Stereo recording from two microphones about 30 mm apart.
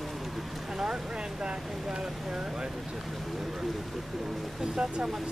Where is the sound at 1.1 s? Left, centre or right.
Right.